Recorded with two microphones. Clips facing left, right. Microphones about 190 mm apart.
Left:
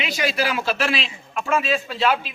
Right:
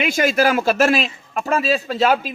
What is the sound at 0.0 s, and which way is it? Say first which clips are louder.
A man's voice: right 7 dB; 50° right (ahead or behind).